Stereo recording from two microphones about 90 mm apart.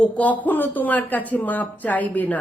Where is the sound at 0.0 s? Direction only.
15° left (ahead or behind).